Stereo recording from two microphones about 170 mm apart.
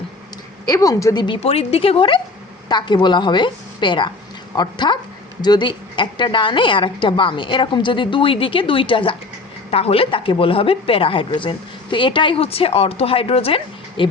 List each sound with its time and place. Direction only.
0.7 s a woman's voice: 20° left (ahead or behind)
1.4 s a woman's voice: 35° left (ahead or behind)